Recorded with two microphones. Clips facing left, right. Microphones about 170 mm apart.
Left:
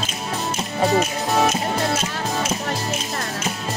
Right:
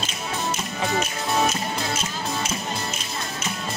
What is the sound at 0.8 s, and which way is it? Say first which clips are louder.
Music: left 8 dB; 40° left (ahead or behind).